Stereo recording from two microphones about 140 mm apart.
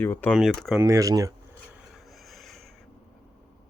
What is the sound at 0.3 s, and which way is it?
Speech, centre (ahead or behind).